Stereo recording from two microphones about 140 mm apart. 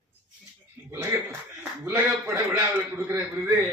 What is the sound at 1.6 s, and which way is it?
A man's voice, 15° right (ahead or behind).